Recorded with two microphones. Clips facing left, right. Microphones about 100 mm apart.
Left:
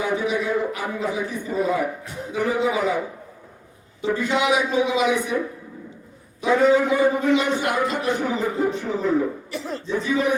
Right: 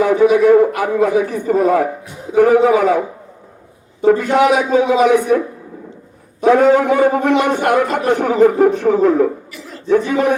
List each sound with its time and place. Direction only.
0.0 s a man's voice: 90° right; by 1.9 s 70° right (ahead or behind)
2.3 s a man's voice: 60° right (ahead or behind)
4.0 s a man's voice: 50° right (ahead or behind)
6.4 s a man's voice: 60° right (ahead or behind)
9.5 s a sound: 35° left (ahead or behind)
9.8 s a man's voice: 60° right (ahead or behind)